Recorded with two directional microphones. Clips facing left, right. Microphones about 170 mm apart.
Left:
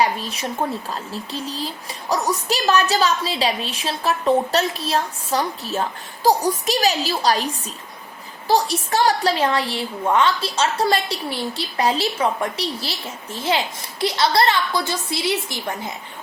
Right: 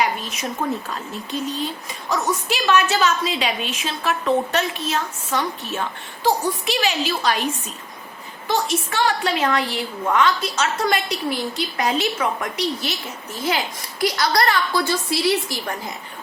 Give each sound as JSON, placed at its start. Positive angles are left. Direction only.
{"t": 0.0, "sound": "a woman's voice", "side_deg": 35}
{"t": 8.4, "sound": "a woman's voice", "side_deg": 35}